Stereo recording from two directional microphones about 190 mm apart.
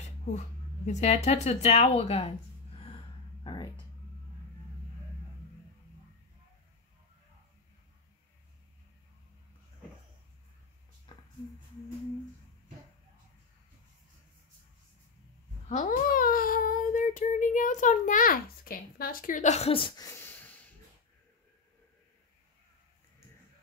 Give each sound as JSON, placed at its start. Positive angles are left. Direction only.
{"t": 0.8, "sound": "speech", "side_deg": 40}
{"t": 15.7, "sound": "speech", "side_deg": 45}
{"t": 20.1, "sound": "snort", "side_deg": 10}